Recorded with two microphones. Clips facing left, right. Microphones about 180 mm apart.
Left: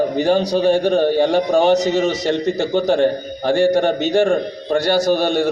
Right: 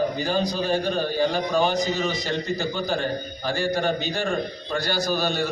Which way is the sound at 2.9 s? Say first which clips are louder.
Left 10 dB; 60° left (ahead or behind).